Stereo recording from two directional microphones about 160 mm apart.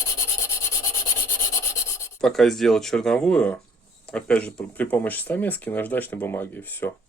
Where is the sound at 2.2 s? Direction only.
Centre (ahead or behind).